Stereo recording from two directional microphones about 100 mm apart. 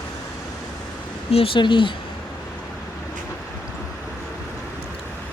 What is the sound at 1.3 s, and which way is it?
Speech, 70° left (ahead or behind).